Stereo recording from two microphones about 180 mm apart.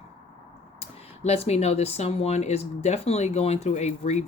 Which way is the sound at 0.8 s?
35° left (ahead or behind).